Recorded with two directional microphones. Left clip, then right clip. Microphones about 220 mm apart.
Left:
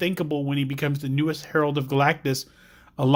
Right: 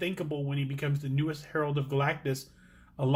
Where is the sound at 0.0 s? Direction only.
50° left (ahead or behind).